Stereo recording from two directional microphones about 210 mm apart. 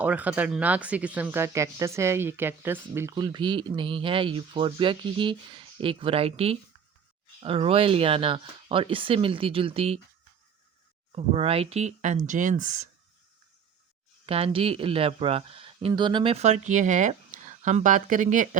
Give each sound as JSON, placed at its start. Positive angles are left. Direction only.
{"t": 0.0, "sound": "speech", "side_deg": -5}
{"t": 11.1, "sound": "speech", "side_deg": -30}
{"t": 14.3, "sound": "speech", "side_deg": -25}